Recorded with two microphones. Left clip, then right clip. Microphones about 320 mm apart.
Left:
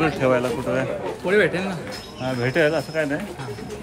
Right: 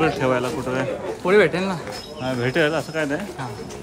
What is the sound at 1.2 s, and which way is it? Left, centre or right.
Speech, centre.